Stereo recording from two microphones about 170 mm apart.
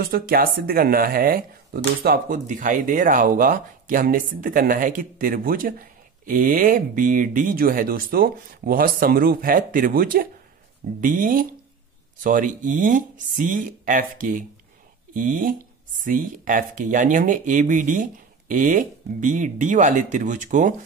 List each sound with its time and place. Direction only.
0.0 s speech: 60° right (ahead or behind)